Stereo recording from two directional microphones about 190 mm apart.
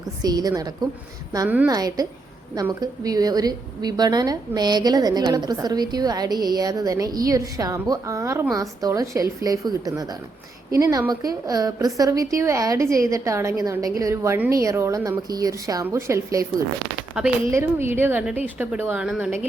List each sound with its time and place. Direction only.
0.2 s a woman's voice: 20° right (ahead or behind)
1.5 s a woman's voice: 10° right (ahead or behind)
1.7 s a woman's voice: 20° right (ahead or behind)
17.2 s a woman's voice: 5° right (ahead or behind)